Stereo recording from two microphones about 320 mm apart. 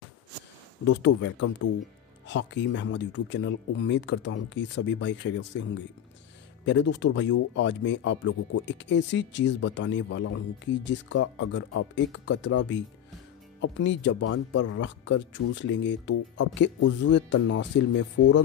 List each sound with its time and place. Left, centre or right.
0.8 s speech: left